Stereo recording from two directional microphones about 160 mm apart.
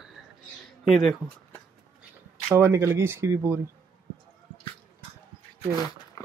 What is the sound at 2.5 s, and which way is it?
Speech, 15° right (ahead or behind).